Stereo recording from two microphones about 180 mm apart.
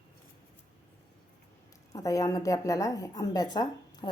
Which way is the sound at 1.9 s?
20° left (ahead or behind).